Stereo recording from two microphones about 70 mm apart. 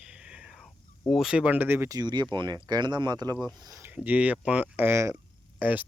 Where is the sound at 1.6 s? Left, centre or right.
Right.